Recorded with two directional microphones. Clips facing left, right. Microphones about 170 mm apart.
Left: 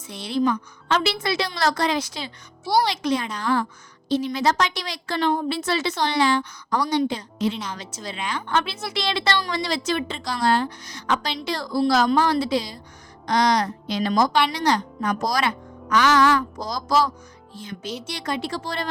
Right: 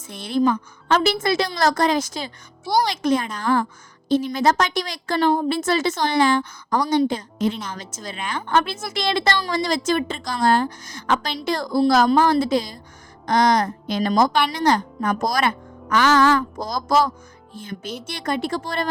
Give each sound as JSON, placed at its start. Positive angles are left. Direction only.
{"t": 0.1, "sound": "a woman's voice", "side_deg": -50}